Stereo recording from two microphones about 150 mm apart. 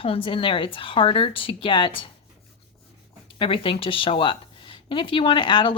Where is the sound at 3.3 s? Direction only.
35° left (ahead or behind).